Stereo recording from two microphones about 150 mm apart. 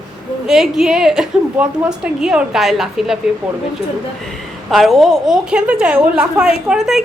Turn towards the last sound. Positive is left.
turn(degrees=0)  # may be behind; listen again after turning